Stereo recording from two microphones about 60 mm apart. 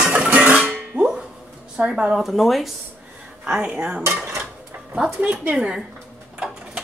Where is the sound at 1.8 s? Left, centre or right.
Centre.